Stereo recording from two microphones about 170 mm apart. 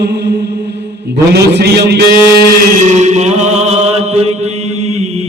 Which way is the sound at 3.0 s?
40° right (ahead or behind).